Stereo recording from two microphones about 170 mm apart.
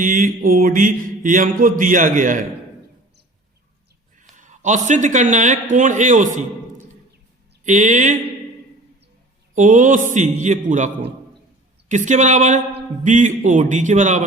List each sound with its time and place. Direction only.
0.0 s mantra: 50° right (ahead or behind)
4.2 s a man's voice: 45° right (ahead or behind)
7.6 s mantra: 45° right (ahead or behind)
9.6 s mantra: 50° right (ahead or behind)